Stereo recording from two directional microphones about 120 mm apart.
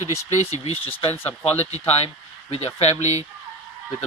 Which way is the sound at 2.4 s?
55° left (ahead or behind).